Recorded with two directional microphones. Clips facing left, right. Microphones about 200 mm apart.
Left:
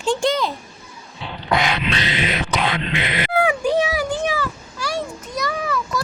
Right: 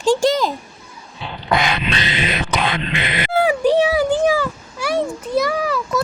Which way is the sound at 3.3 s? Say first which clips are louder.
Right 4 dB; 35° right (ahead or behind).